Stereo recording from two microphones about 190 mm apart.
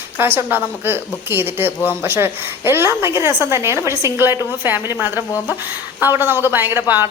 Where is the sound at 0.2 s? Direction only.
10° right (ahead or behind).